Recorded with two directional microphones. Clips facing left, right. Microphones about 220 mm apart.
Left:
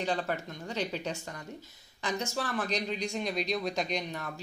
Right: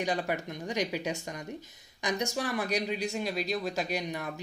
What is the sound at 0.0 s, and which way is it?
Speech, 15° right (ahead or behind).